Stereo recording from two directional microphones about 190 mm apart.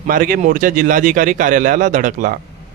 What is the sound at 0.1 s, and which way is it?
A man's voice, 45° right (ahead or behind).